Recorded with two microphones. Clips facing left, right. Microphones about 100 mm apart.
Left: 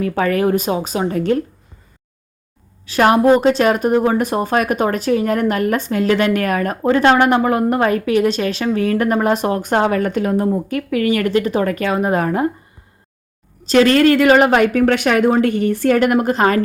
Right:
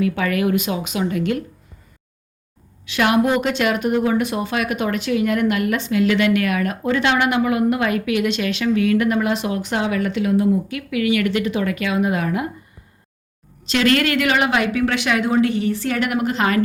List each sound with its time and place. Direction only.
0.0 s speech: 35° left (ahead or behind)
2.8 s speech: 40° left (ahead or behind)
13.7 s a woman's voice: 35° left (ahead or behind)